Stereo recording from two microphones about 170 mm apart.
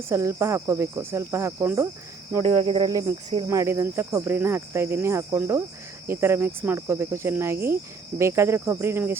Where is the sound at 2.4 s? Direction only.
35° right (ahead or behind).